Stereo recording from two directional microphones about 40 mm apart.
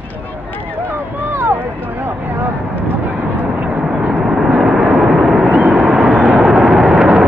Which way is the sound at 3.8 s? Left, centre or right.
Centre.